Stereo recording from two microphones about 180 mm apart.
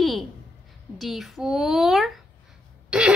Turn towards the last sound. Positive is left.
turn(degrees=-5)  # may be behind; listen again after turning